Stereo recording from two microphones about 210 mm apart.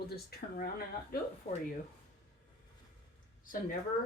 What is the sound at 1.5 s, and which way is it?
Speech, 30° left (ahead or behind).